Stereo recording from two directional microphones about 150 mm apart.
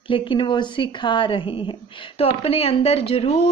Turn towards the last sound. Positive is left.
turn(degrees=40)  # may be behind; listen again after turning